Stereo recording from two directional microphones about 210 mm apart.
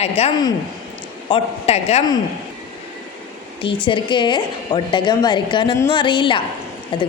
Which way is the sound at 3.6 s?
25° left (ahead or behind).